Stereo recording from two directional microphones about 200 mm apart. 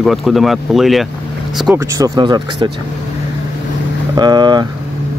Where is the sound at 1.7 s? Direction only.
15° right (ahead or behind).